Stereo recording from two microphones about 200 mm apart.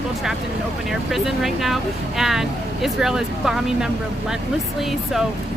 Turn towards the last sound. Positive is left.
turn(degrees=-5)  # may be behind; listen again after turning